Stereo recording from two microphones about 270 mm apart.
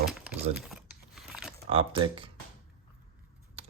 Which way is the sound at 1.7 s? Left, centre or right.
Centre.